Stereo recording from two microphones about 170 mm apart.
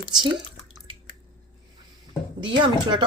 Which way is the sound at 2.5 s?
25° right (ahead or behind).